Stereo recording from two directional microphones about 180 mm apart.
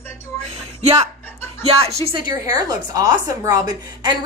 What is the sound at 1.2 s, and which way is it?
Chuckle, 10° left (ahead or behind).